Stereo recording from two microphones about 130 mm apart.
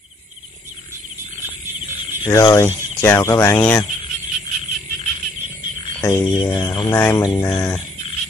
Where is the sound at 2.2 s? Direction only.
25° left (ahead or behind).